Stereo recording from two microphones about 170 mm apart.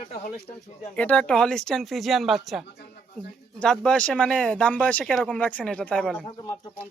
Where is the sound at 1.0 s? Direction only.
10° left (ahead or behind).